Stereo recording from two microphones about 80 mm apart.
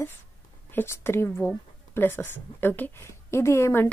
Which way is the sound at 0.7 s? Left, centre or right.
Left.